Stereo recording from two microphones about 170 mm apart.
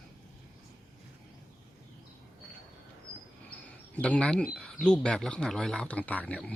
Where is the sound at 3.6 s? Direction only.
5° left (ahead or behind).